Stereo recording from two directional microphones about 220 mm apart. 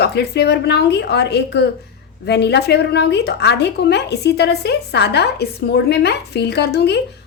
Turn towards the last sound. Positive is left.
turn(degrees=50)  # may be behind; listen again after turning